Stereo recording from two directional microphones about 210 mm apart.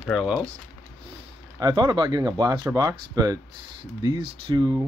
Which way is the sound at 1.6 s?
20° right (ahead or behind).